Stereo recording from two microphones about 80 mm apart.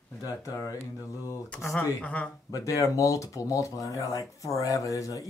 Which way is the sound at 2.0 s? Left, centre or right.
Centre.